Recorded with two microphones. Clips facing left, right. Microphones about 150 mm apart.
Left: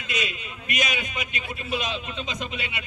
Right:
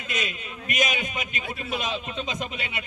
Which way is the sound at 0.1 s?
45° right (ahead or behind).